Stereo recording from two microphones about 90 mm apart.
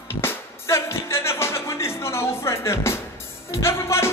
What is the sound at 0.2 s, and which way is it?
Music, 30° left (ahead or behind).